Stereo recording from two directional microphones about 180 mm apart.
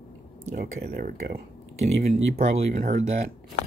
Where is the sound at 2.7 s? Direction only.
40° right (ahead or behind).